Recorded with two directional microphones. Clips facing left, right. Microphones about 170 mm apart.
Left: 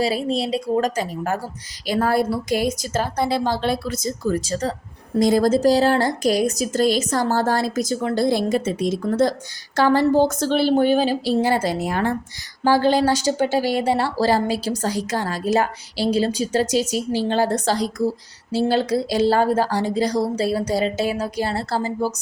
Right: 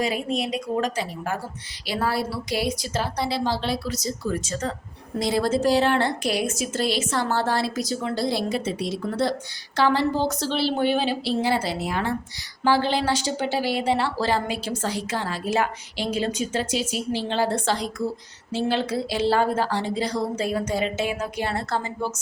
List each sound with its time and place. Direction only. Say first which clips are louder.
0.0 s a woman's voice: left 4 dB; 30° left (ahead or behind)
0.9 s a woman's voice: left 4 dB; 45° left (ahead or behind)